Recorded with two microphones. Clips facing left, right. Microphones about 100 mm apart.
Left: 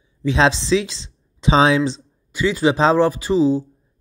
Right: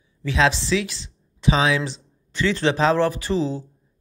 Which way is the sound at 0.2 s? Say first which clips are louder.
Left 3 dB; 20° left (ahead or behind).